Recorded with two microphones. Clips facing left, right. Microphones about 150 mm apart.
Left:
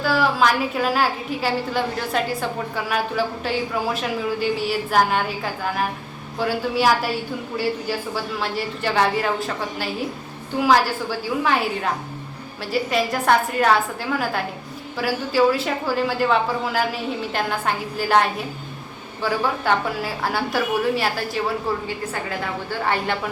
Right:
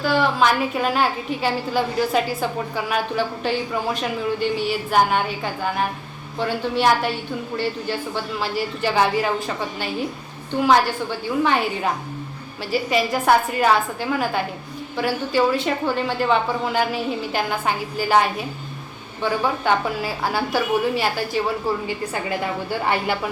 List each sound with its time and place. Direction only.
0.0 s a woman's voice: centre (ahead or behind)